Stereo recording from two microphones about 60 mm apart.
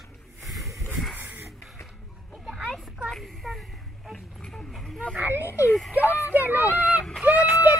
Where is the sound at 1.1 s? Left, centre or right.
Right.